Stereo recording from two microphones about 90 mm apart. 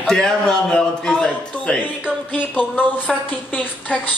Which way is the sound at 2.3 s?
20° left (ahead or behind).